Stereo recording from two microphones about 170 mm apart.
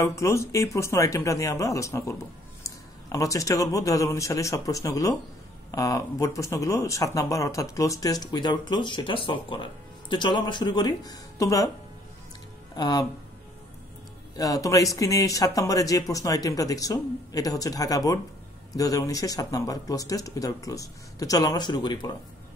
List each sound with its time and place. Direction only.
0.0 s a man's voice: 15° left (ahead or behind)
12.7 s speech: 25° left (ahead or behind)
14.3 s speech: 20° left (ahead or behind)